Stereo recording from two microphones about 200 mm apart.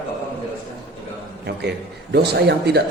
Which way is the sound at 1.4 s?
55° right (ahead or behind).